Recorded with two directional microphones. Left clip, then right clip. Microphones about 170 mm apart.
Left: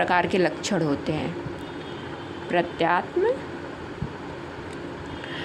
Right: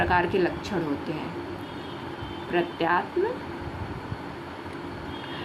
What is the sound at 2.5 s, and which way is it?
Speech, 45° left (ahead or behind).